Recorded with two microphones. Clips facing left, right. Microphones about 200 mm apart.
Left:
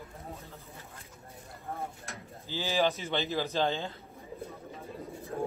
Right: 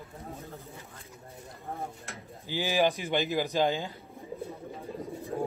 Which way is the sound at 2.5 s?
15° right (ahead or behind).